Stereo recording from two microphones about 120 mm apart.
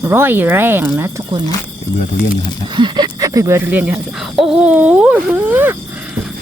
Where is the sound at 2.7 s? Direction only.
40° right (ahead or behind).